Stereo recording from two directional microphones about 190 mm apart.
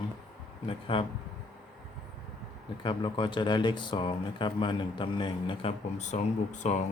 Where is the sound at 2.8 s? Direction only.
25° left (ahead or behind).